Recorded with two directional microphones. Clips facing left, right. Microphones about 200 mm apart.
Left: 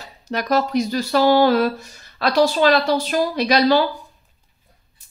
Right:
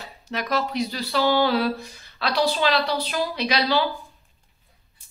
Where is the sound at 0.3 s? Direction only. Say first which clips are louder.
Left 6 dB; 40° left (ahead or behind).